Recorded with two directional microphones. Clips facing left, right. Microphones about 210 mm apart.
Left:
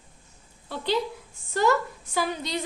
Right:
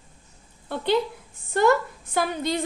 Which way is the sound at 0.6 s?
55° right (ahead or behind).